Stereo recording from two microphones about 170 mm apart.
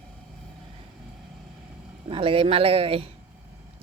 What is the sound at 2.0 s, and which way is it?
Speech, 30° right (ahead or behind).